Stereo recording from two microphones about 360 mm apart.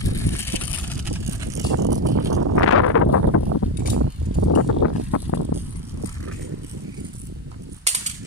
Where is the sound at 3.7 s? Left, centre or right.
Right.